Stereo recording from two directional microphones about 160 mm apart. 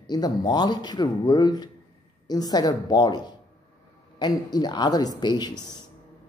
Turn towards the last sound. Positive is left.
turn(degrees=25)  # may be behind; listen again after turning